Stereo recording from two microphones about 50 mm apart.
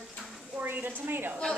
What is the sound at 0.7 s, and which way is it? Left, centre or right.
Speech, right.